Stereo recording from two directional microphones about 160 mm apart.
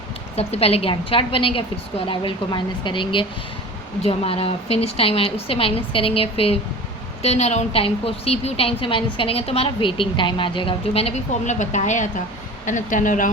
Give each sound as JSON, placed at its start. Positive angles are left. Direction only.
{"t": 0.3, "sound": "a woman's voice", "side_deg": 40}